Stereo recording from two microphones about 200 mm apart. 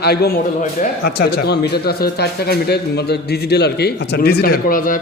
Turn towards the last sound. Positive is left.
turn(degrees=45)  # may be behind; listen again after turning